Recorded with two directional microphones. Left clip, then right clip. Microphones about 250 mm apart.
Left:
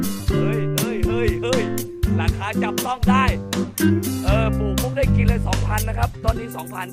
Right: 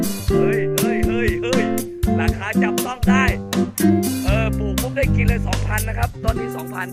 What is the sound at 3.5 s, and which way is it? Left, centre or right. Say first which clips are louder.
Music: right 2 dB; centre.